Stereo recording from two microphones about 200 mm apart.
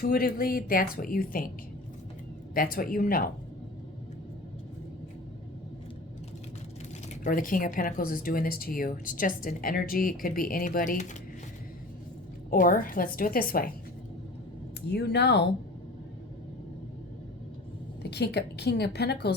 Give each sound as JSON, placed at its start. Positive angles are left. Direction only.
{"t": 0.0, "sound": "speech", "side_deg": 50}
{"t": 2.6, "sound": "speech", "side_deg": 45}
{"t": 7.3, "sound": "speech", "side_deg": 40}
{"t": 12.5, "sound": "speech", "side_deg": 45}
{"t": 14.8, "sound": "a woman's voice", "side_deg": 55}
{"t": 18.0, "sound": "a woman's voice", "side_deg": 55}